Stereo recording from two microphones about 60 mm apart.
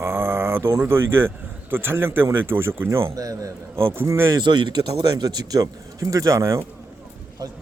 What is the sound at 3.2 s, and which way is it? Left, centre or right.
Speech, right.